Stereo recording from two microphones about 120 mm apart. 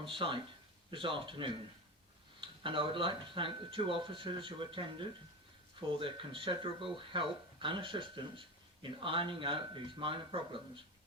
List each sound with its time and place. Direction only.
0.0 s speech: 45° right (ahead or behind)